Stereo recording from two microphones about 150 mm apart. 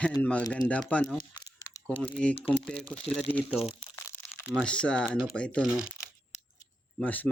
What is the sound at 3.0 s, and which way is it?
Speech, 40° left (ahead or behind).